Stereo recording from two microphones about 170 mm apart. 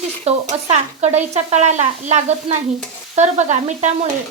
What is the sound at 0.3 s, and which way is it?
A woman's voice, 40° right (ahead or behind).